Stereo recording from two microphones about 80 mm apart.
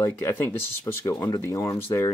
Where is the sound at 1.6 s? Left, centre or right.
Left.